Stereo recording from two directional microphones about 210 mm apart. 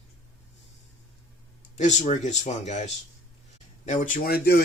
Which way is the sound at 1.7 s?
35° left (ahead or behind).